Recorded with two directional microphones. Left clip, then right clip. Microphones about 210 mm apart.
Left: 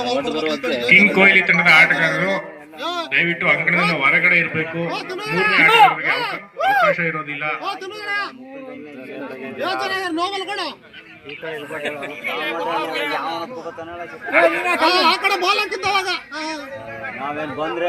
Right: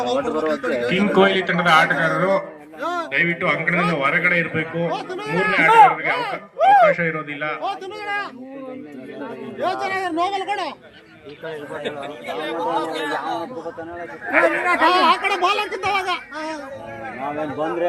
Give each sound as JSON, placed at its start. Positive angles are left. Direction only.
{"t": 0.0, "sound": "a man's voice", "side_deg": 40}
{"t": 9.6, "sound": "a man's voice", "side_deg": 45}
{"t": 12.4, "sound": "speech", "side_deg": -30}
{"t": 14.8, "sound": "a man's voice", "side_deg": 50}